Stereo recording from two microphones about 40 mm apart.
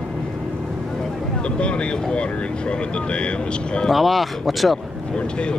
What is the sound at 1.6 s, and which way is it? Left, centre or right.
Speech, left.